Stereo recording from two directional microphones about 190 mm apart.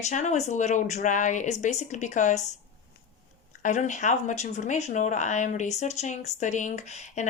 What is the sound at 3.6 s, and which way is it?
Speech, 40° left (ahead or behind).